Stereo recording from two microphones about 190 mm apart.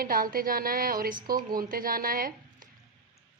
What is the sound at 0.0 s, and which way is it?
A woman's voice, 50° right (ahead or behind).